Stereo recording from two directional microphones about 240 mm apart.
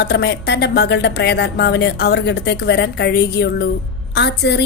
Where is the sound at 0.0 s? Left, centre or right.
Left.